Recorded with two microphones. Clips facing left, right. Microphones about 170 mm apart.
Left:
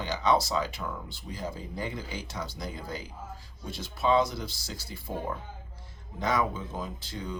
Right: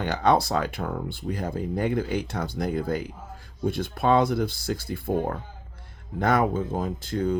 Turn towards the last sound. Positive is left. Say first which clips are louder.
# right 12 dB
turn(degrees=-50)  # may be behind; listen again after turning